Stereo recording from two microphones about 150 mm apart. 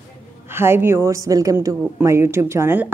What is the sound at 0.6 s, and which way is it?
A woman's voice, 15° right (ahead or behind).